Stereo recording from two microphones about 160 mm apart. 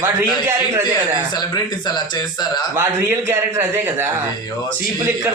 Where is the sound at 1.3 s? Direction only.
25° left (ahead or behind).